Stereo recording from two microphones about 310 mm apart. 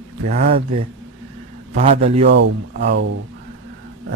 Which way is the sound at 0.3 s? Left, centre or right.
Right.